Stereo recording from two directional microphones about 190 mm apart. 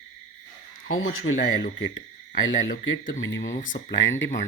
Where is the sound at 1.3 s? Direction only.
50° left (ahead or behind).